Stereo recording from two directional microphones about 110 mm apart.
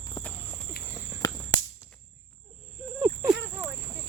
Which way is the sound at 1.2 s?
30° left (ahead or behind).